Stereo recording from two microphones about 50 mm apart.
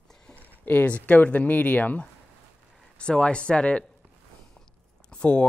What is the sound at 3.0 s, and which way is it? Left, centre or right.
Speech, left.